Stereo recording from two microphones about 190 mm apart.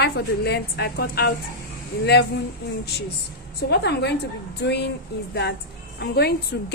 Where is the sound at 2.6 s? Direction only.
55° left (ahead or behind).